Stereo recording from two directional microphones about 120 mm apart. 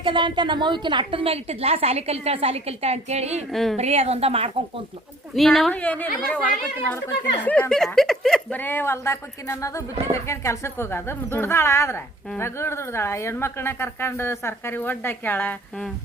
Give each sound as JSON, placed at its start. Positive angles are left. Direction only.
{"t": 0.0, "sound": "a woman's voice", "side_deg": -40}
{"t": 3.5, "sound": "speech", "side_deg": 0}
{"t": 3.8, "sound": "a woman's voice", "side_deg": -60}
{"t": 5.7, "sound": "a woman's voice", "side_deg": 10}
{"t": 8.5, "sound": "speech", "side_deg": 15}